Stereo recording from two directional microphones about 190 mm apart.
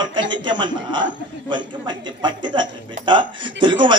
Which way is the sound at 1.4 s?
25° right (ahead or behind).